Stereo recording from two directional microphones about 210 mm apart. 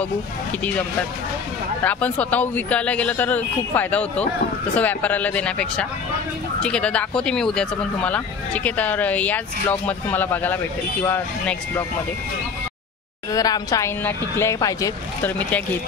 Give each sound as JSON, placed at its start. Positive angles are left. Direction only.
{"t": 1.8, "sound": "speech", "side_deg": 10}
{"t": 13.3, "sound": "speech", "side_deg": 15}